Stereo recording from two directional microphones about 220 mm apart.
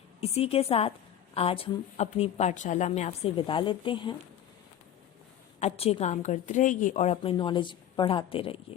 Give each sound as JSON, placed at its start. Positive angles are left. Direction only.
{"t": 0.2, "sound": "a woman's voice", "side_deg": 25}
{"t": 5.5, "sound": "a woman's voice", "side_deg": 30}